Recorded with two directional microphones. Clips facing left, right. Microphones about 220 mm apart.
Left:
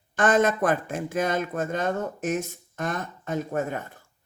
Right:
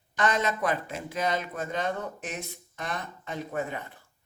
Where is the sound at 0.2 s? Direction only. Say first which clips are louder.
Left 6 dB; 50° left (ahead or behind).